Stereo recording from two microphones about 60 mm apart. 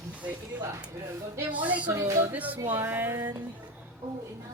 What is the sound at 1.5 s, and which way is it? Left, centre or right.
Speech, right.